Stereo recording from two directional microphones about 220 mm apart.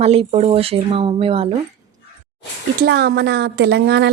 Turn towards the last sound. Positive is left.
turn(degrees=-50)  # may be behind; listen again after turning